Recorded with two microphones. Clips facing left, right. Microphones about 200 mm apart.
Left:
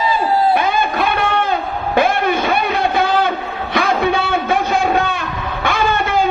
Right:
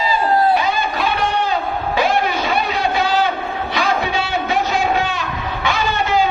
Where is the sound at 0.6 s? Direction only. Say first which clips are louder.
Left 3 dB; 55° left (ahead or behind).